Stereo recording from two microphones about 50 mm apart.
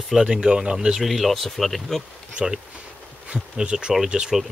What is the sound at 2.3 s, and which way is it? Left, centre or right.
Speech, centre.